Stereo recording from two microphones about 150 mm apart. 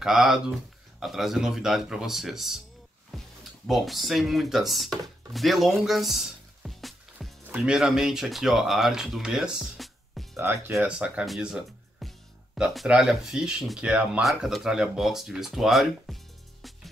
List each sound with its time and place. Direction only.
0.0 s speech: 5° right (ahead or behind)
3.1 s a sound: centre (ahead or behind)
3.6 s speech: centre (ahead or behind)
5.9 s music: centre (ahead or behind)
7.4 s speech: 10° right (ahead or behind)
10.3 s music: 15° right (ahead or behind)
10.7 s speech: 5° right (ahead or behind)